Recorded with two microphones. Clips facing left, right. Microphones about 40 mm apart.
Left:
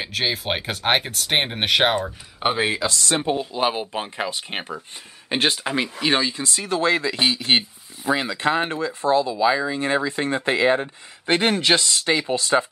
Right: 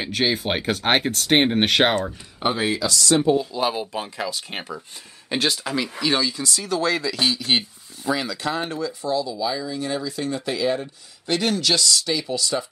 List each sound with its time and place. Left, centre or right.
0.0 s speech: centre
2.4 s speech: left